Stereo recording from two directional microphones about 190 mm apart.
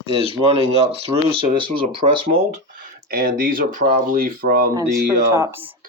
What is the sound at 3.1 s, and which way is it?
Speech, 50° right (ahead or behind).